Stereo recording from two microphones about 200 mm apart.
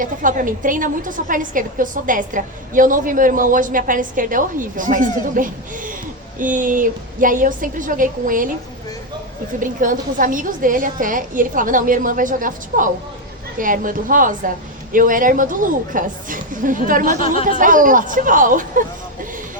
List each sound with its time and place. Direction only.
0.0 s a woman's voice: 40° right (ahead or behind)
9.6 s a woman's voice: 40° right (ahead or behind)
17.2 s speech: 30° left (ahead or behind)
17.6 s a woman's voice: 40° right (ahead or behind)